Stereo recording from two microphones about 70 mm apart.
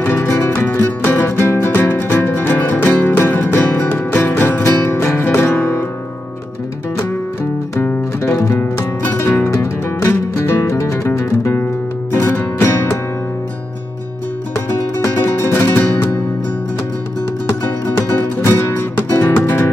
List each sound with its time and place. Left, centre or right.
0.1 s music: left
8.4 s music: left
15.2 s music: left
17.8 s music: left